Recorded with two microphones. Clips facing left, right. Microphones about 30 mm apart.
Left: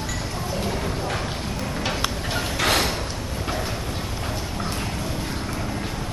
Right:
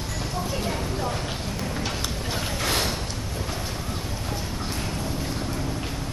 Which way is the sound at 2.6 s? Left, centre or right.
Left.